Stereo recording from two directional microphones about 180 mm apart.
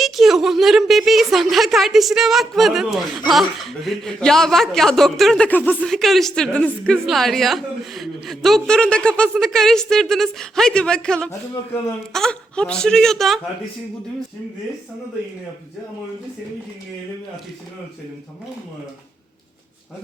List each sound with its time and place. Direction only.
0.0 s a woman's voice: centre (ahead or behind)
11.3 s speech: 15° left (ahead or behind)
12.1 s a woman's voice: 5° left (ahead or behind)